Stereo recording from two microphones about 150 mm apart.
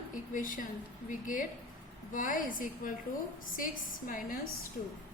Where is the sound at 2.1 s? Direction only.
65° left (ahead or behind).